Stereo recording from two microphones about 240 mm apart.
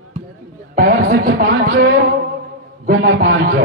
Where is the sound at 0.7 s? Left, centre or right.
Right.